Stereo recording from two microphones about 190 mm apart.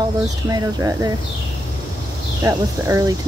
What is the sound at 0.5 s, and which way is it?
Speech, 20° right (ahead or behind).